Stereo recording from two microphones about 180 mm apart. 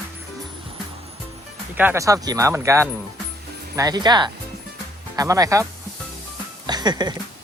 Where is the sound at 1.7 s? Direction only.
10° right (ahead or behind).